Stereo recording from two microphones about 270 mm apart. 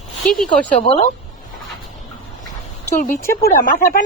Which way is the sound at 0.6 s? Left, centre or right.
Left.